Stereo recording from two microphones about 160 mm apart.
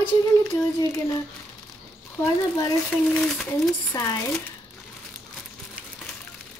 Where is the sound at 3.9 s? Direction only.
20° left (ahead or behind).